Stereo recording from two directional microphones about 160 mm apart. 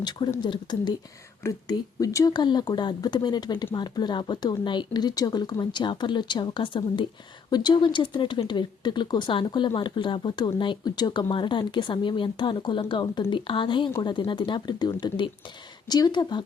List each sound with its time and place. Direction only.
0.0 s speech: 25° left (ahead or behind)